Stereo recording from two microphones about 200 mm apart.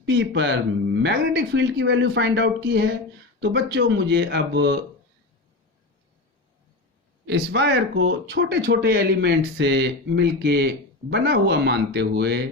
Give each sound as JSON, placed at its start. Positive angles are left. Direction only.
{"t": 0.0, "sound": "speech", "side_deg": -60}
{"t": 7.3, "sound": "speech", "side_deg": -60}